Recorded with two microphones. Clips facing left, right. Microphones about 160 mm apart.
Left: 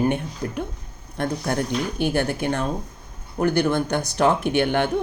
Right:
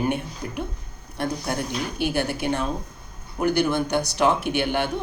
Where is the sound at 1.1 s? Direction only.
50° left (ahead or behind).